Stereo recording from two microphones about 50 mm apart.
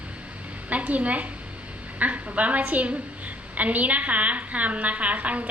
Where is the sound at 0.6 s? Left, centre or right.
Right.